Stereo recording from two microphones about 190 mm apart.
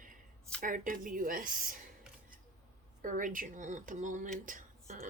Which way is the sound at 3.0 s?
45° right (ahead or behind).